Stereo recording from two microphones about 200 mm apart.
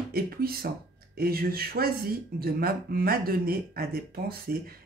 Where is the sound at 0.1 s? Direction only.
50° right (ahead or behind).